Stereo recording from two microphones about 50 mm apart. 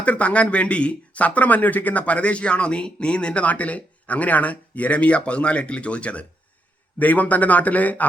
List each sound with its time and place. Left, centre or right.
0.0 s speech: left